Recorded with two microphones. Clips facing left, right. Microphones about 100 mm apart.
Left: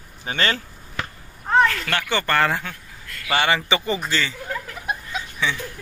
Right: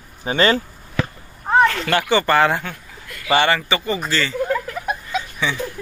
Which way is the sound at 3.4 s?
15° left (ahead or behind).